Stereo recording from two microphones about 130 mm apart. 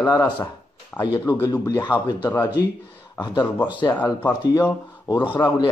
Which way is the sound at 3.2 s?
30° left (ahead or behind).